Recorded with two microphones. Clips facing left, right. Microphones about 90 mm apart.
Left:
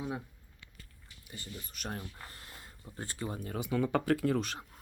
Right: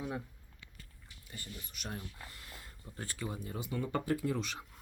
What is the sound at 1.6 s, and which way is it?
Speech, 40° left (ahead or behind).